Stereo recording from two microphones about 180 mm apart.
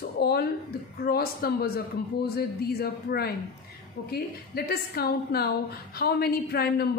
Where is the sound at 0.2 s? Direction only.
60° left (ahead or behind).